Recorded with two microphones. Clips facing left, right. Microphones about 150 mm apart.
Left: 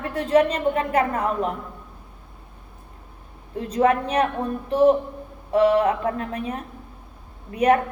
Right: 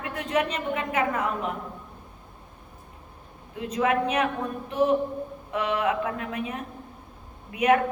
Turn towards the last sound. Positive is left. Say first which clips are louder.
# left 3 dB
turn(degrees=35)  # may be behind; listen again after turning